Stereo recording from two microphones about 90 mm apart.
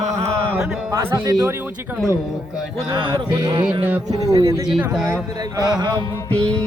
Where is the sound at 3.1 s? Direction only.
50° right (ahead or behind).